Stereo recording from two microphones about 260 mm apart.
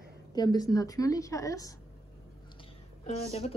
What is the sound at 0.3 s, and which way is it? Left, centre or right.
Speech, centre.